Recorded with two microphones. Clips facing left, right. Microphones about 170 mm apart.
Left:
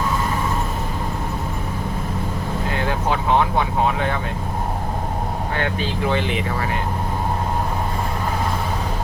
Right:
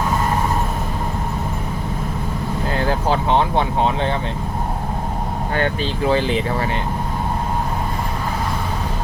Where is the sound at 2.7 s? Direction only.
35° right (ahead or behind).